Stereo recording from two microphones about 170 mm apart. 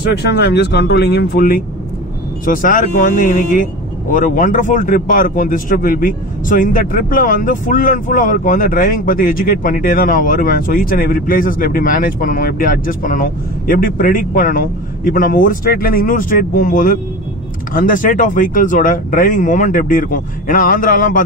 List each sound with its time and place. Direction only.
0.1 s a man's voice: 75° left (ahead or behind); by 21.2 s 50° left (ahead or behind)